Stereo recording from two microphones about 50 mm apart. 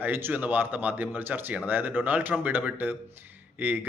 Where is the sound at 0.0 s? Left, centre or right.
Right.